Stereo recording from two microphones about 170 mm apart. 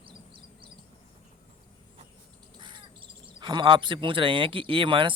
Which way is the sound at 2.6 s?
30° right (ahead or behind).